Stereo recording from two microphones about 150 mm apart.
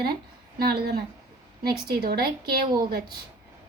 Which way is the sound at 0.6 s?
90° right.